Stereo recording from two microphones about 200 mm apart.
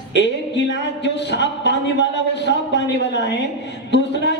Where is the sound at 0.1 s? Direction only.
60° left (ahead or behind).